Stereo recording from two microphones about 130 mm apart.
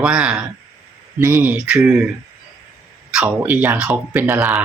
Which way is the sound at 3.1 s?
10° right (ahead or behind).